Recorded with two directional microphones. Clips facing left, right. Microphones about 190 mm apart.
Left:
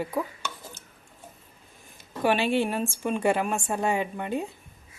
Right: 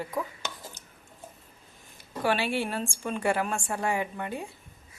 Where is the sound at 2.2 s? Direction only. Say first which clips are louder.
Left 4 dB; 20° left (ahead or behind).